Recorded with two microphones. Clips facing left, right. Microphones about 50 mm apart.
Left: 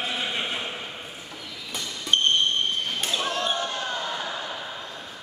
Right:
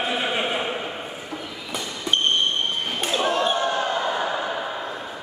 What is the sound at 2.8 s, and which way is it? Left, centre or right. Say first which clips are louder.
Basketball bounce: right 4 dB; centre.